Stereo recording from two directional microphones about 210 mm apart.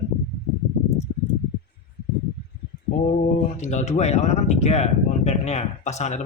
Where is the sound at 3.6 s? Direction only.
35° left (ahead or behind).